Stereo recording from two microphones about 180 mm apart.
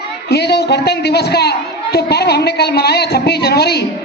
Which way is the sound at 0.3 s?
65° left (ahead or behind).